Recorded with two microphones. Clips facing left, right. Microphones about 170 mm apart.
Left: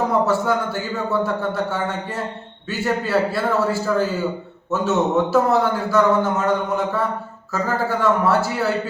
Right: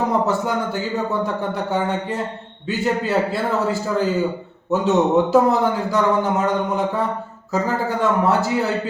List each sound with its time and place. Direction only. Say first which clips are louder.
0.3 s a man's voice: left 1 dB; 15° right (ahead or behind)